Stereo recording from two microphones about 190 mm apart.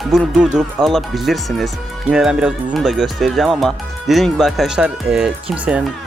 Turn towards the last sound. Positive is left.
turn(degrees=-5)  # may be behind; listen again after turning